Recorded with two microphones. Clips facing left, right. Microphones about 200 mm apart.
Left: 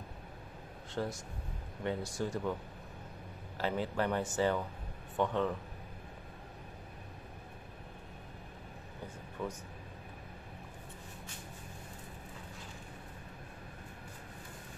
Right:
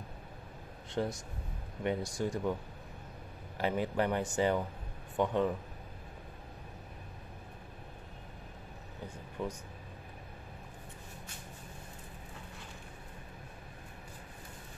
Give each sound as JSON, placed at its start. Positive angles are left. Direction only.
{"t": 1.0, "sound": "speech", "side_deg": -20}
{"t": 3.5, "sound": "a man's voice", "side_deg": -15}
{"t": 9.4, "sound": "speech", "side_deg": -20}